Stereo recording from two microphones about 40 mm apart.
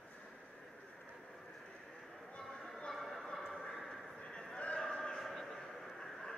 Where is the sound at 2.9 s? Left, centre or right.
Centre.